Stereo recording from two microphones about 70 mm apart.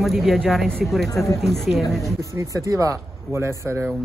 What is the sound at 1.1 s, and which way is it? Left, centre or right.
Speech, left.